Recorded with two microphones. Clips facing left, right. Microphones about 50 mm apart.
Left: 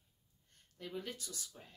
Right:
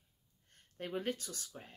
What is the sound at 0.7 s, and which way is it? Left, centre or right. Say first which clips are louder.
Speech: right 6 dB; right.